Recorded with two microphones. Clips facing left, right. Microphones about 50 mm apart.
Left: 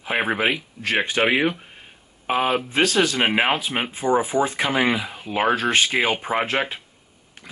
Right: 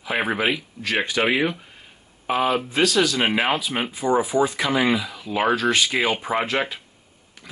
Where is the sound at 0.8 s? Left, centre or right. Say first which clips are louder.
Left 1 dB; left.